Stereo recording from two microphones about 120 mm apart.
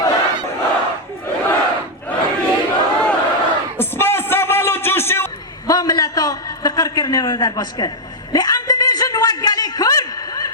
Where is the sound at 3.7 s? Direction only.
20° left (ahead or behind).